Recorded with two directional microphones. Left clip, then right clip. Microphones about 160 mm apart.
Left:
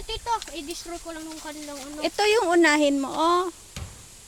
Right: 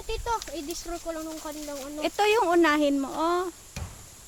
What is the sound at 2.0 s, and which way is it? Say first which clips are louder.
Speech: left 1 dB; 10° left (ahead or behind).